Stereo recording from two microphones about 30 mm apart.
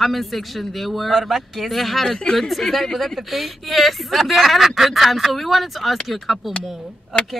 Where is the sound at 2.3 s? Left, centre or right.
Centre.